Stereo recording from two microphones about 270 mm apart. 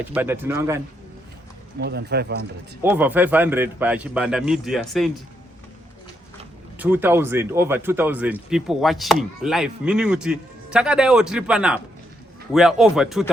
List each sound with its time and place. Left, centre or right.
0.0 s speech: centre
1.8 s speech: right
2.8 s speech: centre
6.7 s speech: centre